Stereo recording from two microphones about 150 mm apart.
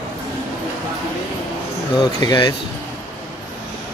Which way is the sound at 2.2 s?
25° left (ahead or behind).